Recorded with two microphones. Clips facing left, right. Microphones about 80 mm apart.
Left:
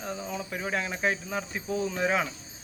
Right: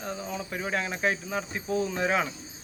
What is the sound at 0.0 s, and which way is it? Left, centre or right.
Speech, centre.